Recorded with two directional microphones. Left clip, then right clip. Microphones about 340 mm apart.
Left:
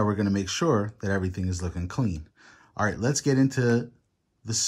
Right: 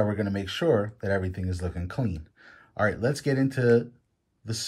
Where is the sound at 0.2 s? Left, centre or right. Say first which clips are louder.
Left 1 dB; centre.